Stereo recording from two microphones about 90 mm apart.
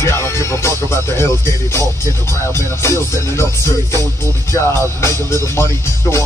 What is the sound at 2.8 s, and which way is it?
Music, 30° left (ahead or behind).